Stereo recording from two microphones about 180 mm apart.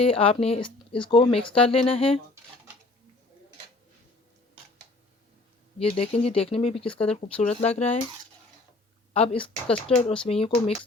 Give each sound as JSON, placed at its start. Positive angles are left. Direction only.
{"t": 0.0, "sound": "speech", "side_deg": 30}
{"t": 5.8, "sound": "speech", "side_deg": 35}
{"t": 9.1, "sound": "speech", "side_deg": 30}